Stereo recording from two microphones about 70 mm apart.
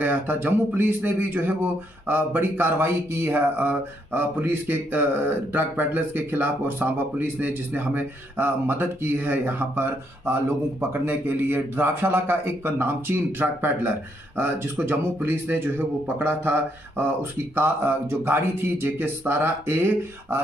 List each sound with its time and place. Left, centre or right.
0.0 s speech: right